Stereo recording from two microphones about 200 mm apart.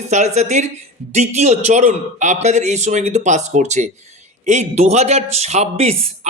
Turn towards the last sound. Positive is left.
turn(degrees=-30)  # may be behind; listen again after turning